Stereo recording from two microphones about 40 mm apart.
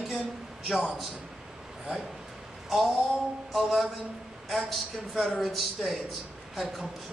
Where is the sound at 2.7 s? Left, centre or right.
Centre.